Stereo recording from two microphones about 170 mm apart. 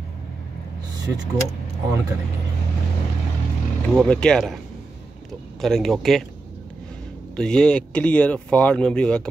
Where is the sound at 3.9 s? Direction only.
5° left (ahead or behind).